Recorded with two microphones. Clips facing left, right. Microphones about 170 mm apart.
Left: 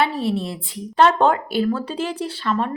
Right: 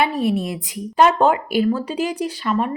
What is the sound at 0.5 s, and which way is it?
Speech, 10° right (ahead or behind).